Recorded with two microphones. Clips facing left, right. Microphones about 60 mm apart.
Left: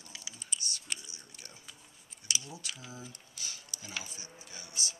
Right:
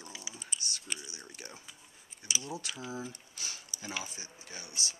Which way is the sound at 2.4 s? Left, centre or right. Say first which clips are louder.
Right 6 dB; right.